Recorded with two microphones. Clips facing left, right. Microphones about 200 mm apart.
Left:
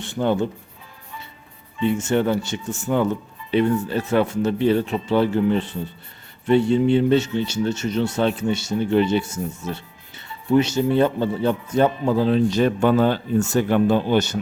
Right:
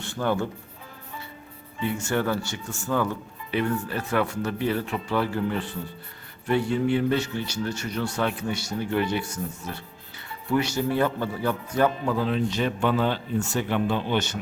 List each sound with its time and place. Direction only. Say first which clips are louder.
0.0 s speech: left 5 dB; 20° left (ahead or behind)
1.8 s a man's voice: left 6 dB; 20° left (ahead or behind); by 14.3 s 40° left (ahead or behind)